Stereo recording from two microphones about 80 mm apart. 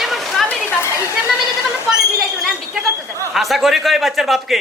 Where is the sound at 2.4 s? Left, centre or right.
Centre.